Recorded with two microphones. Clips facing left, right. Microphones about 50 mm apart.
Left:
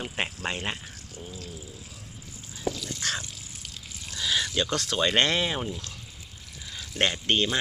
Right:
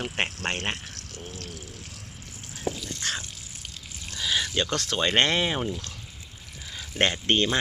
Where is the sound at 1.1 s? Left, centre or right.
Right.